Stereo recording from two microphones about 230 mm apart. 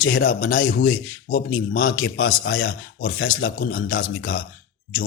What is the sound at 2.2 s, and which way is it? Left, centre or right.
A man's voice, left.